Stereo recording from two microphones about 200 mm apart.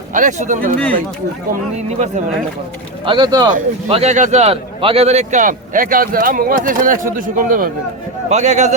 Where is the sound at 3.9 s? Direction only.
30° right (ahead or behind).